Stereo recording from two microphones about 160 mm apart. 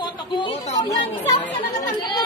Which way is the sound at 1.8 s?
25° left (ahead or behind).